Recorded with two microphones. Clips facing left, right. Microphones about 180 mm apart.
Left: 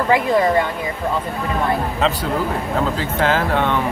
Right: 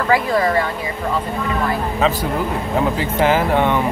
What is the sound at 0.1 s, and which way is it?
Speech, 20° left (ahead or behind).